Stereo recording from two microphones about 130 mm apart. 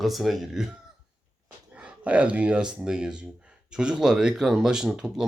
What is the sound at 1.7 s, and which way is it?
Speech, 10° right (ahead or behind).